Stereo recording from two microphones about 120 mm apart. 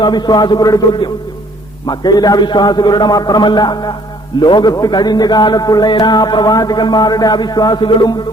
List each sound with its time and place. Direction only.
0.0 s a man's voice: 35° left (ahead or behind)